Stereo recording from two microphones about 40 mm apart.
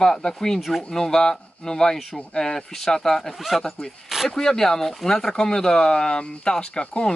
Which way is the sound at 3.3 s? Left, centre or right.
Centre.